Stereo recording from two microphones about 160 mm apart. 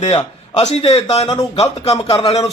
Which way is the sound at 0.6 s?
40° left (ahead or behind).